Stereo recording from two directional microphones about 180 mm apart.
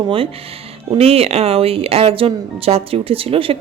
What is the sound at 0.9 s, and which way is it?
A woman's voice, 35° right (ahead or behind).